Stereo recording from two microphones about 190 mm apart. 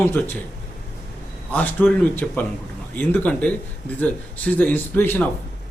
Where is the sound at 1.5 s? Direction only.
10° left (ahead or behind).